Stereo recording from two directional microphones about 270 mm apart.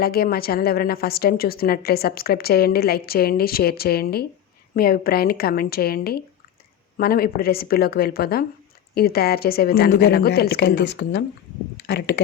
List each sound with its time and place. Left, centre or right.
0.0 s a woman's voice: left